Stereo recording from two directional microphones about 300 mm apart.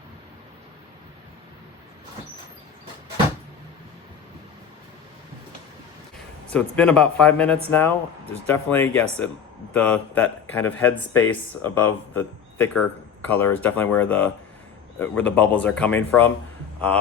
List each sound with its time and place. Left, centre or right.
6.5 s speech: centre
12.1 s a sound: centre
13.2 s speech: centre